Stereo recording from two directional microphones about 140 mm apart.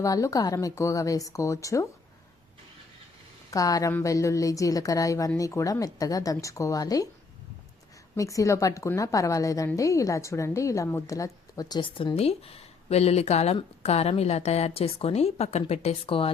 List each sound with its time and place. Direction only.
0.0 s speech: 25° left (ahead or behind)
3.5 s speech: 25° left (ahead or behind)
8.1 s a woman's voice: 25° left (ahead or behind); by 16.3 s 40° left (ahead or behind)